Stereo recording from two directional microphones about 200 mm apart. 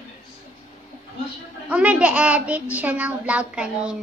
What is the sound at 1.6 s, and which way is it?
A child's voice, 5° right (ahead or behind).